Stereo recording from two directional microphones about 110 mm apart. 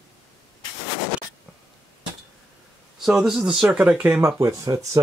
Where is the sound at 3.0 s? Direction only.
5° right (ahead or behind).